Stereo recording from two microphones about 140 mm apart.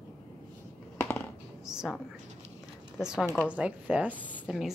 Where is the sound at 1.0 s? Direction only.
15° left (ahead or behind).